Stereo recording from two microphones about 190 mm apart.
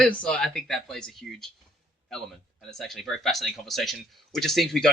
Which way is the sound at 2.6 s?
Centre (ahead or behind).